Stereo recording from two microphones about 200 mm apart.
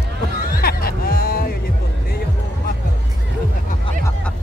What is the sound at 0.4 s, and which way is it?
Music, 45° left (ahead or behind).